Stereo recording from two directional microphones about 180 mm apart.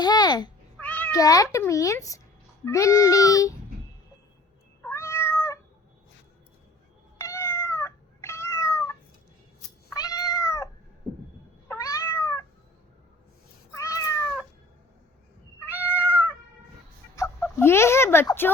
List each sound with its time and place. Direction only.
0.0 s cat: 25° left (ahead or behind)
0.8 s cat: 10° left (ahead or behind)
1.2 s a child's voice: 20° left (ahead or behind)
4.8 s cat: 15° left (ahead or behind)
7.2 s cat: 15° left (ahead or behind)
11.7 s cat: 20° left (ahead or behind)
13.7 s cat: 15° left (ahead or behind)
15.7 s cat: 10° right (ahead or behind)
17.2 s chicken: 15° left (ahead or behind)